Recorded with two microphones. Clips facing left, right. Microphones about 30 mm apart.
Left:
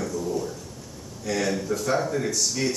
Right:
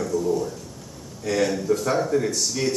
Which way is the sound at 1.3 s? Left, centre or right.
Centre.